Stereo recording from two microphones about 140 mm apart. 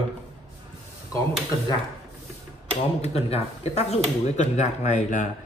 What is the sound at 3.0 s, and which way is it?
Speech, 50° left (ahead or behind).